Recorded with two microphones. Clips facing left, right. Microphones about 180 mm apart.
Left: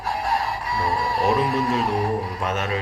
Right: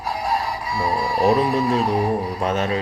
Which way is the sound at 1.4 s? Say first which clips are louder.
Right 3 dB; 35° right (ahead or behind).